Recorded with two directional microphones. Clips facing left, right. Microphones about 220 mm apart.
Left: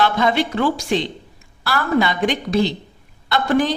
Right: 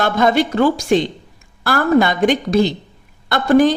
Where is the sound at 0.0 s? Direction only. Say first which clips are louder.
Right 3 dB; 45° right (ahead or behind).